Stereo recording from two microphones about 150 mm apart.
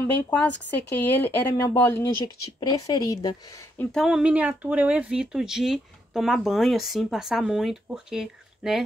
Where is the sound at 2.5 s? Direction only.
25° left (ahead or behind).